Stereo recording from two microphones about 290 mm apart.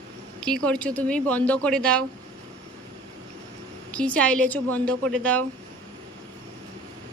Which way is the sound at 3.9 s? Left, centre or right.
Centre.